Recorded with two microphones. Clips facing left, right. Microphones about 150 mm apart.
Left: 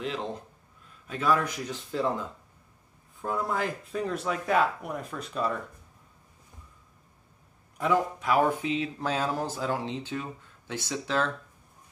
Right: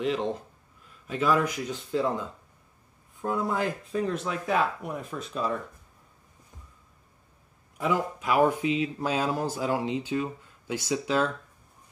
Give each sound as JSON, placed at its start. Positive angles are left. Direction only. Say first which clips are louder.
{"t": 1.0, "sound": "speech", "louder": "right 2 dB", "side_deg": -5}
{"t": 7.7, "sound": "a man's voice", "louder": "left 1 dB", "side_deg": -5}